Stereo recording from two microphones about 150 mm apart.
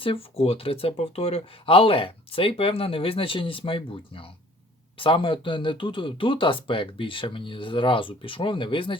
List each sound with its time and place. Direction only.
0.0 s speech: 40° left (ahead or behind)